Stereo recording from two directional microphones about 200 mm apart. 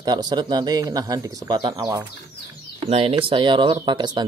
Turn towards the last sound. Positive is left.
turn(degrees=-20)  # may be behind; listen again after turning